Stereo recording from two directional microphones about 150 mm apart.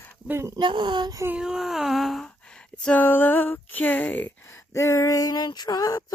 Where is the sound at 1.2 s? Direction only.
5° right (ahead or behind).